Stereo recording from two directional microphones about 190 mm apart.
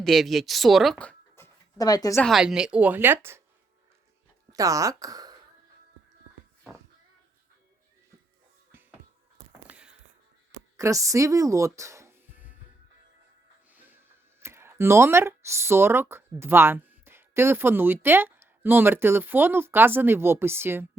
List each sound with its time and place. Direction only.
0.0 s speech: centre (ahead or behind)
1.8 s a woman's voice: 20° left (ahead or behind)
2.2 s a woman's voice: centre (ahead or behind)
4.5 s speech: 15° right (ahead or behind)
8.7 s music: 10° right (ahead or behind)
9.6 s a sound: 5° right (ahead or behind)
10.8 s speech: 15° right (ahead or behind)
13.7 s music: 10° right (ahead or behind)
14.4 s speech: 15° right (ahead or behind)